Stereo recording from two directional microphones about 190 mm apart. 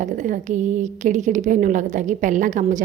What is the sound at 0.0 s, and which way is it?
A woman's voice, 40° right (ahead or behind).